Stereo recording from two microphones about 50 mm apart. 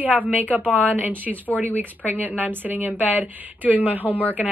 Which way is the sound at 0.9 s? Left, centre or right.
Right.